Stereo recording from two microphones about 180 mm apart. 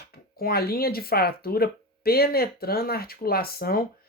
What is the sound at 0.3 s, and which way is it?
Speech, 55° left (ahead or behind).